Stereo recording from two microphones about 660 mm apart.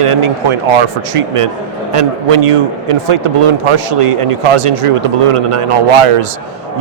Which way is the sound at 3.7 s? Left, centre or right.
Right.